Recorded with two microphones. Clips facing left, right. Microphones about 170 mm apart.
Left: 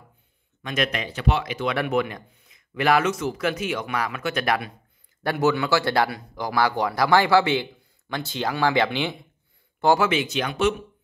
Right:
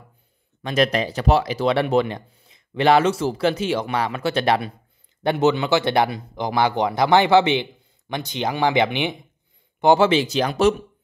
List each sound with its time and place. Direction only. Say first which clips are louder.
0.6 s speech: right 6 dB; 35° right (ahead or behind)
10.0 s speech: right 5 dB; 35° right (ahead or behind)